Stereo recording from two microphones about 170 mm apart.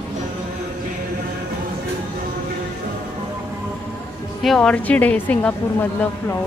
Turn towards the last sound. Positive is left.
turn(degrees=10)  # may be behind; listen again after turning